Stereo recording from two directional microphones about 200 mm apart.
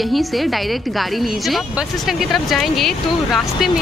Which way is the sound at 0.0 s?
Centre (ahead or behind).